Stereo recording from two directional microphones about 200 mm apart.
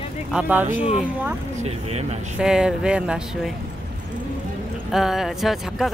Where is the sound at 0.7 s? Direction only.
30° left (ahead or behind).